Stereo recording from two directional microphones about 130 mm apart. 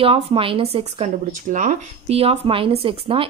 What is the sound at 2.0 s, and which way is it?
Speech, 50° right (ahead or behind).